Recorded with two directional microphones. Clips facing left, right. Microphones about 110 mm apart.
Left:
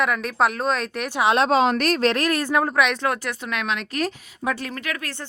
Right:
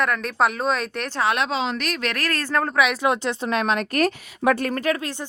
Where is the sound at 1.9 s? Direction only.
35° left (ahead or behind).